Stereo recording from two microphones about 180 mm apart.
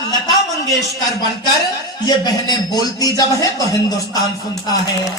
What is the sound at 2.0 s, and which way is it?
A man's voice, 20° left (ahead or behind).